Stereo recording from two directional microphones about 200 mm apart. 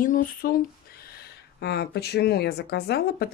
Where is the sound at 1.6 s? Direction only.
55° left (ahead or behind).